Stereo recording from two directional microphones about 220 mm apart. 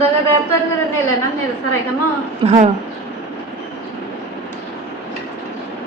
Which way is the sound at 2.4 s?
25° right (ahead or behind).